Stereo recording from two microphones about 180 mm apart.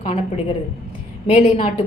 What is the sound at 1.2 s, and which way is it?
Speech, 35° left (ahead or behind).